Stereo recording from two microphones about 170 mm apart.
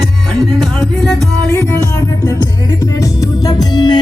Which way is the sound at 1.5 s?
20° left (ahead or behind).